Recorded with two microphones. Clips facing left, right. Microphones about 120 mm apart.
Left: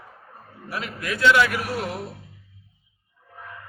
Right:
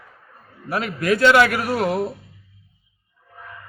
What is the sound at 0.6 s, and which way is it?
A man's voice, 65° right (ahead or behind).